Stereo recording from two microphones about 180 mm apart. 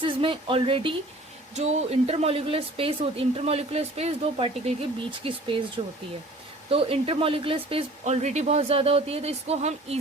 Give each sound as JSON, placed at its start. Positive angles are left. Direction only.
{"t": 0.0, "sound": "speech", "side_deg": -25}